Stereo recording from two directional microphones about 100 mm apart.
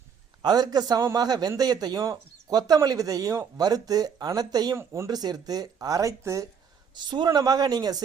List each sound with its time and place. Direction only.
0.4 s speech: 45° right (ahead or behind)
4.8 s speech: 25° right (ahead or behind)
5.1 s speech: 40° right (ahead or behind)
6.9 s speech: 50° right (ahead or behind)